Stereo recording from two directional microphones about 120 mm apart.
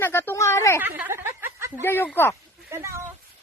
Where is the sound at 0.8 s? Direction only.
15° right (ahead or behind).